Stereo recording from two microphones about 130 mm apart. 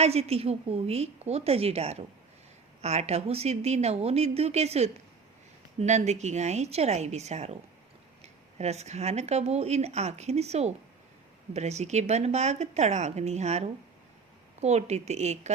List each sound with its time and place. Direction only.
0.0 s a woman's voice: 55° right (ahead or behind)